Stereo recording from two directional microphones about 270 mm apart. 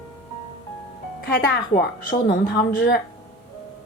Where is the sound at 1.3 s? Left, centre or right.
Left.